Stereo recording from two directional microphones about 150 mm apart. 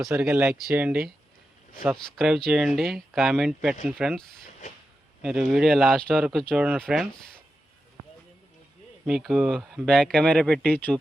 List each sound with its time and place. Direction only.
0.1 s speech: 10° right (ahead or behind)
9.0 s speech: centre (ahead or behind)